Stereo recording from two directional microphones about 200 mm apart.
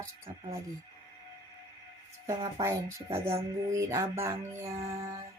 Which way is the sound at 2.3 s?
20° right (ahead or behind).